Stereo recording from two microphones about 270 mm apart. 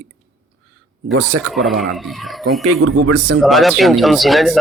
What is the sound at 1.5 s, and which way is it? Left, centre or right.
Speech, centre.